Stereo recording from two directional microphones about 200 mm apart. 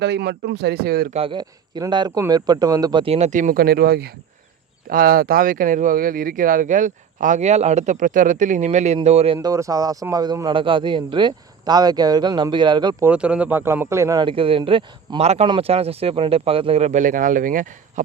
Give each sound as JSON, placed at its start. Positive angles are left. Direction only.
{"t": 0.0, "sound": "speech", "side_deg": -55}
{"t": 1.1, "sound": "a man's voice", "side_deg": -25}
{"t": 13.1, "sound": "a man's voice", "side_deg": -5}